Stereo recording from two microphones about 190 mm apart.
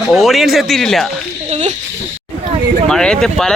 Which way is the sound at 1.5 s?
40° right (ahead or behind).